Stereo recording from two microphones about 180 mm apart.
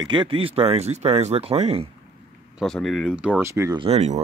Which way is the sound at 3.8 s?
35° right (ahead or behind).